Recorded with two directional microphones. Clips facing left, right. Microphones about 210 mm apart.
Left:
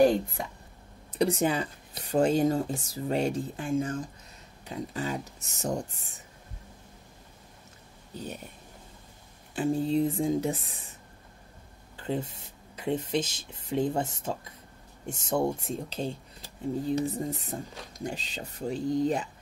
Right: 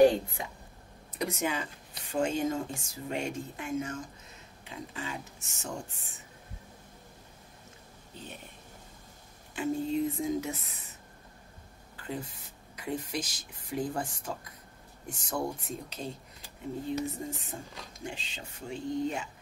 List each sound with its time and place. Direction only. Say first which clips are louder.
1.1 s speech: left 7 dB; 35° left (ahead or behind)
9.6 s speech: left 4 dB; 35° left (ahead or behind)
12.0 s speech: left 6 dB; 30° left (ahead or behind)